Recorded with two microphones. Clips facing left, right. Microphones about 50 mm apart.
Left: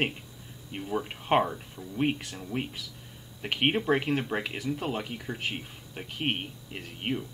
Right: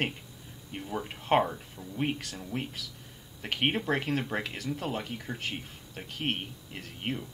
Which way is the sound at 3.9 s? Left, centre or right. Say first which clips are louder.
Left 3 dB; centre.